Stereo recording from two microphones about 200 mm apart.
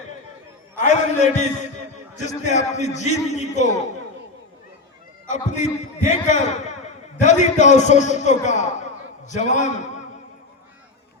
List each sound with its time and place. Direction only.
0.8 s a man's voice: 35° left (ahead or behind)
5.3 s a man's voice: 35° left (ahead or behind)